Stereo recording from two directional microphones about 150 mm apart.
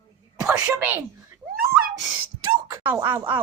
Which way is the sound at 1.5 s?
80° right.